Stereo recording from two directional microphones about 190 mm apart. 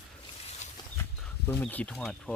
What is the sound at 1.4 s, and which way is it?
Speech, 10° left (ahead or behind).